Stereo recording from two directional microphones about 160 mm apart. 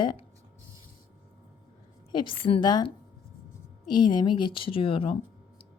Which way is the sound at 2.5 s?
30° left (ahead or behind).